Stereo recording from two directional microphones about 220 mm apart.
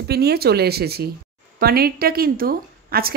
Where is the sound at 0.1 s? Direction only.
45° right (ahead or behind).